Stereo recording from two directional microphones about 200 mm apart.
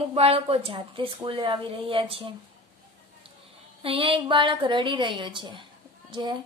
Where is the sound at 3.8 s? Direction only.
25° right (ahead or behind).